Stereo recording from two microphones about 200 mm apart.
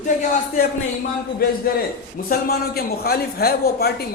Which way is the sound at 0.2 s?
45° left (ahead or behind).